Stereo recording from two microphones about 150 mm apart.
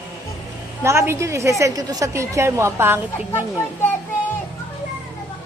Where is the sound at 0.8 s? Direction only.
20° right (ahead or behind).